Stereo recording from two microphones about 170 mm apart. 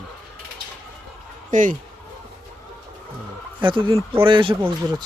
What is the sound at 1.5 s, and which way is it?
Speech, 50° right (ahead or behind).